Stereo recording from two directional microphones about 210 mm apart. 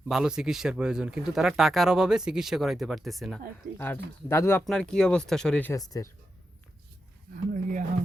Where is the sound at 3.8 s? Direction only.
10° left (ahead or behind).